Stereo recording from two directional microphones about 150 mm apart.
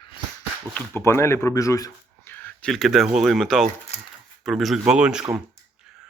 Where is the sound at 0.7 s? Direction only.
15° left (ahead or behind); by 5.2 s 5° right (ahead or behind).